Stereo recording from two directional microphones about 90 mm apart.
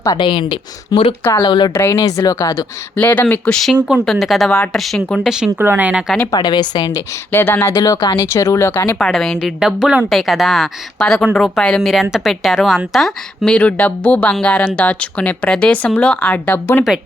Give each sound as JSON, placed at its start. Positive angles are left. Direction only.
{"t": 0.2, "sound": "speech", "side_deg": 65}
{"t": 1.4, "sound": "speech", "side_deg": 60}
{"t": 1.7, "sound": "speech", "side_deg": 25}
{"t": 2.0, "sound": "speech", "side_deg": 40}
{"t": 3.0, "sound": "speech", "side_deg": 20}
{"t": 3.5, "sound": "a woman's voice", "side_deg": 0}
{"t": 5.2, "sound": "speech", "side_deg": -5}
{"t": 5.5, "sound": "speech", "side_deg": -20}
{"t": 6.3, "sound": "speech", "side_deg": 55}
{"t": 7.3, "sound": "speech", "side_deg": 25}
{"t": 7.8, "sound": "speech", "side_deg": 50}
{"t": 8.3, "sound": "speech", "side_deg": 30}
{"t": 9.0, "sound": "a woman's voice", "side_deg": 5}
{"t": 9.4, "sound": "a woman's voice", "side_deg": -5}